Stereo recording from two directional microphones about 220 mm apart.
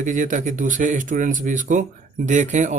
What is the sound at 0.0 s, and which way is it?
Speech, 35° right (ahead or behind).